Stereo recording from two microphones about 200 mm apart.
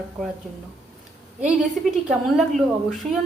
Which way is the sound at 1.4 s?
5° right (ahead or behind).